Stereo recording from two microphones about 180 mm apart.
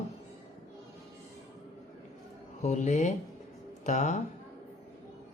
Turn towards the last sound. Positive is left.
turn(degrees=40)  # may be behind; listen again after turning